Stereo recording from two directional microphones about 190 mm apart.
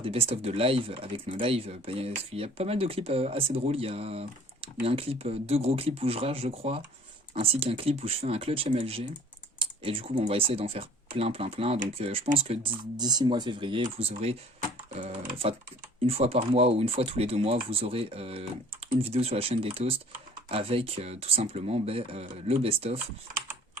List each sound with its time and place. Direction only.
0.0 s speech: 30° right (ahead or behind)
16.0 s speech: 30° right (ahead or behind)